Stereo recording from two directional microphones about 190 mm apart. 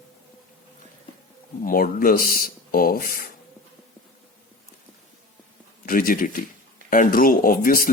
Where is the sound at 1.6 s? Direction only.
50° left (ahead or behind).